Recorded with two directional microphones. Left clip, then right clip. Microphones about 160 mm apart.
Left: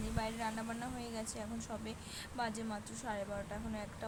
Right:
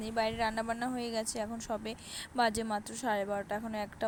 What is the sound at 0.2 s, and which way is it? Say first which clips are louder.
A woman's voice: right 9 dB; 50° right (ahead or behind).